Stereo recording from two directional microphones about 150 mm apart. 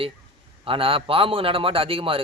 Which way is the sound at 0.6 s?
35° right (ahead or behind).